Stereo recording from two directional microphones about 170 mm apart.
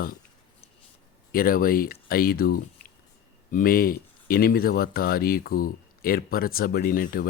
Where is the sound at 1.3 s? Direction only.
60° left (ahead or behind).